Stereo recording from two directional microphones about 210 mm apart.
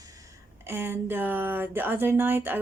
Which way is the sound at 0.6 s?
10° right (ahead or behind).